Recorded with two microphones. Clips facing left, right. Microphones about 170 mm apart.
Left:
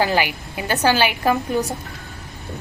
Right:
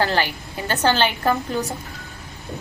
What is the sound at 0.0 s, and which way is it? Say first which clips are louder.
Speech: left 2 dB; 15° left (ahead or behind).